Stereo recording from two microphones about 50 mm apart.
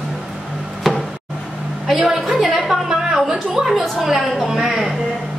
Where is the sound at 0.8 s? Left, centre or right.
Centre.